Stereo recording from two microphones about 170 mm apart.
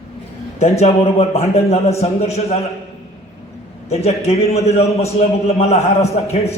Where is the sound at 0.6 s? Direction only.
40° left (ahead or behind).